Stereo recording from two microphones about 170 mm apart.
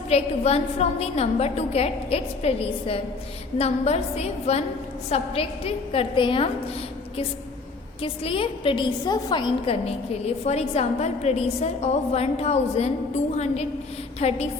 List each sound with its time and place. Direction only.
0.1 s a woman's voice: 40° left (ahead or behind)
8.0 s a woman's voice: 35° left (ahead or behind)